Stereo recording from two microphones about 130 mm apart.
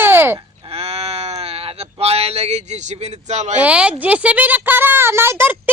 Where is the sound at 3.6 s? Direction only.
10° right (ahead or behind).